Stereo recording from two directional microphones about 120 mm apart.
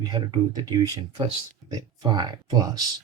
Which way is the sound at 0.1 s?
35° right (ahead or behind).